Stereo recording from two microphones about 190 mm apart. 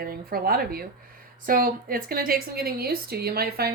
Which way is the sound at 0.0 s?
50° right (ahead or behind).